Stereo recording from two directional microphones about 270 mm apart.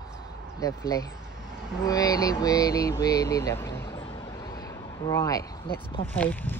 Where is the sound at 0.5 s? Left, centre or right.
Centre.